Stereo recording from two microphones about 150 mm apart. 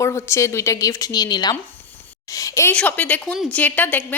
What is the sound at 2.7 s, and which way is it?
A woman's voice, 10° left (ahead or behind).